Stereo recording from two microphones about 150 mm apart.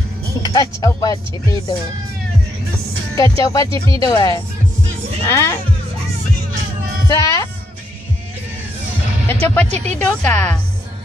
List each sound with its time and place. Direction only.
0.4 s speech: 25° left (ahead or behind)
3.2 s speech: 20° left (ahead or behind)
7.1 s speech: 20° left (ahead or behind)
9.3 s a woman's voice: 15° left (ahead or behind)